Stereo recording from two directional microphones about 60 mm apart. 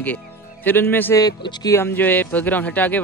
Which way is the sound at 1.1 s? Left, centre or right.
Left.